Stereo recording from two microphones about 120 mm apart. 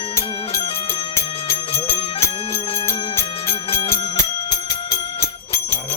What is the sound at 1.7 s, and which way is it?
Music, 55° left (ahead or behind).